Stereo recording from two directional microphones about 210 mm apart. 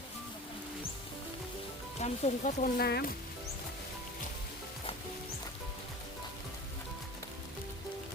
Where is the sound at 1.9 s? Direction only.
30° left (ahead or behind); by 3.1 s 45° left (ahead or behind).